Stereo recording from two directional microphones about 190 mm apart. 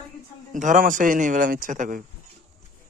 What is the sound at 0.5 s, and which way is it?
A man's voice, 40° right (ahead or behind).